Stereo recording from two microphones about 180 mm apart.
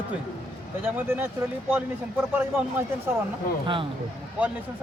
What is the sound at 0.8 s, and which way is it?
Speech, 10° right (ahead or behind).